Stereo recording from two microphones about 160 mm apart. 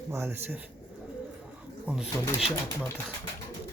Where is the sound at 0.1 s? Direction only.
15° right (ahead or behind).